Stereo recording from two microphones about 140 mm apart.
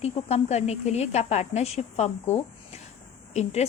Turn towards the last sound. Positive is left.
turn(degrees=55)  # may be behind; listen again after turning